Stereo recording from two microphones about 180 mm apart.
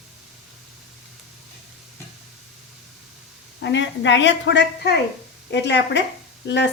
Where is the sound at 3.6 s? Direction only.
80° left.